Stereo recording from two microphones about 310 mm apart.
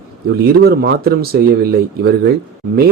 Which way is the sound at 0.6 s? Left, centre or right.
Right.